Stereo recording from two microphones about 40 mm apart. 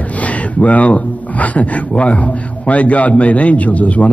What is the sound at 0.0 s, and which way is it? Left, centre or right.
Speech, left.